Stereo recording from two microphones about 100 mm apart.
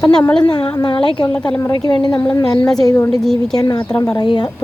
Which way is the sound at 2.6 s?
5° left (ahead or behind).